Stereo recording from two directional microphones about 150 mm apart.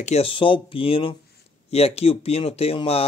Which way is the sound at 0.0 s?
45° left (ahead or behind).